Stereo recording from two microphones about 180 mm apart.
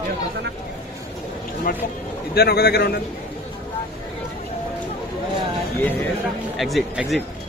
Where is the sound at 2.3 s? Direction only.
60° left (ahead or behind).